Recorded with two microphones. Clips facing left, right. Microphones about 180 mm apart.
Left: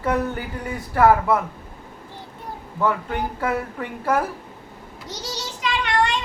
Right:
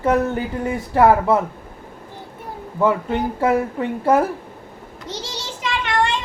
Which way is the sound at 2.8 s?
25° right (ahead or behind).